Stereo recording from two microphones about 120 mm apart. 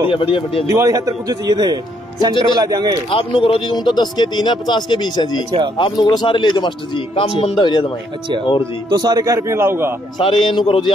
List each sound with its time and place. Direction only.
0.0 s speech: 45° left (ahead or behind)
0.7 s speech: 30° right (ahead or behind)
3.1 s speech: 50° left (ahead or behind)
3.7 s speech: 35° left (ahead or behind)
8.9 s a man's voice: 35° right (ahead or behind)
10.1 s speech: 40° left (ahead or behind)